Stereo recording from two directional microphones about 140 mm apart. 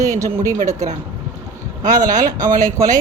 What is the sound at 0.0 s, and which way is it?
Speech, 20° right (ahead or behind).